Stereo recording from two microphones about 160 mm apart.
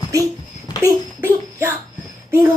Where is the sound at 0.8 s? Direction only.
15° right (ahead or behind).